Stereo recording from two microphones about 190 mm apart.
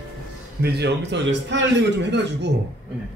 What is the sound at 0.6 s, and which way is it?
A man's voice, 60° right (ahead or behind).